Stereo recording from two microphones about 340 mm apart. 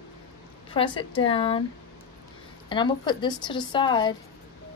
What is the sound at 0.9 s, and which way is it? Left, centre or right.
Speech, centre.